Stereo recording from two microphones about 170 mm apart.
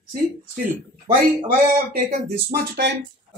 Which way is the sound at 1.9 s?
65° right (ahead or behind).